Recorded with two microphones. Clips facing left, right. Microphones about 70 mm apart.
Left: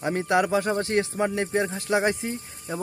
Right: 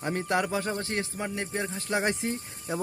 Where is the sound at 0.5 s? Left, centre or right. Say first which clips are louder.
Left 7 dB; left.